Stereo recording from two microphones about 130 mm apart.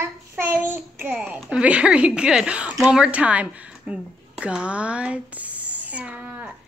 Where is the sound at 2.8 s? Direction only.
5° right (ahead or behind).